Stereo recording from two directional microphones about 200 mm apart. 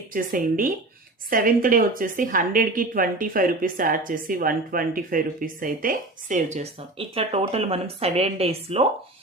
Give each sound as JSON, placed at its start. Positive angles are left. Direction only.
{"t": 0.1, "sound": "a woman's voice", "side_deg": -45}